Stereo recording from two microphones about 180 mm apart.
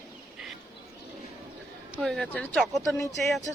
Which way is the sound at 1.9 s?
Centre (ahead or behind).